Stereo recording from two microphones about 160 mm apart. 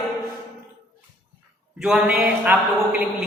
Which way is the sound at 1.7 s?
5° right (ahead or behind).